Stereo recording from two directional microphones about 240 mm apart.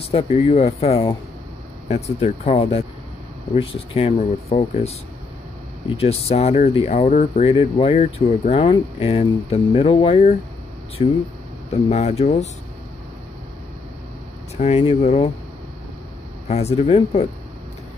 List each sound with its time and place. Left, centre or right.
0.1 s speech: left
5.9 s speech: left
14.6 s speech: left
16.4 s speech: left